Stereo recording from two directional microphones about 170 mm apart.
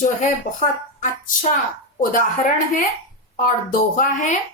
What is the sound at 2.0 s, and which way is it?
A woman's voice, 50° left (ahead or behind).